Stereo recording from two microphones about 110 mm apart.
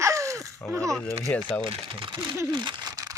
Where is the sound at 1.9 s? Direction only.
50° right (ahead or behind).